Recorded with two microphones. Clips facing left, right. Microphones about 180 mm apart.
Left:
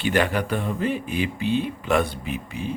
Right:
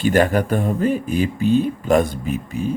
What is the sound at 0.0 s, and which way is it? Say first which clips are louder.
Speech: right 6 dB; 45° right (ahead or behind).